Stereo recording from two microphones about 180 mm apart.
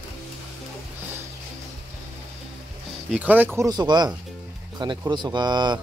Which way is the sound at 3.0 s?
10° right (ahead or behind).